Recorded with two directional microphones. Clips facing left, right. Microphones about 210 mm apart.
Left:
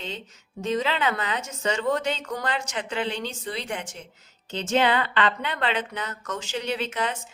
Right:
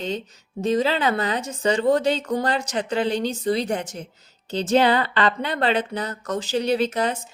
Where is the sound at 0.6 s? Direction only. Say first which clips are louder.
Right 5 dB; 35° right (ahead or behind).